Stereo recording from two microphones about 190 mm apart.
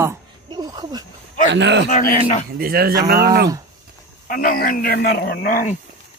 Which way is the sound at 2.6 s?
55° right (ahead or behind).